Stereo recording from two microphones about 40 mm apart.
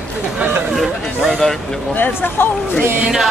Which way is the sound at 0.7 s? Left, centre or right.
Centre.